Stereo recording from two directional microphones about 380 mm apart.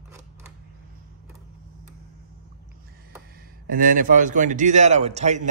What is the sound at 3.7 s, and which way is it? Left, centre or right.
A man's voice, right.